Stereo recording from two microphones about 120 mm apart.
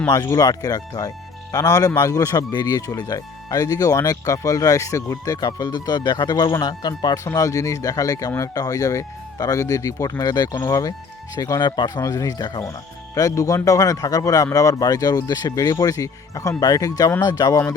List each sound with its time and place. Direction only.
0.1 s a man's voice: 30° left (ahead or behind)